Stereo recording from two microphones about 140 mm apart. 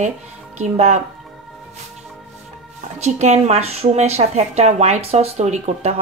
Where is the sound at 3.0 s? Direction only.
55° right (ahead or behind).